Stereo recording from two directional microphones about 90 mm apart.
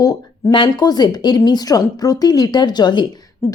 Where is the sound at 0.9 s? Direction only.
50° left (ahead or behind).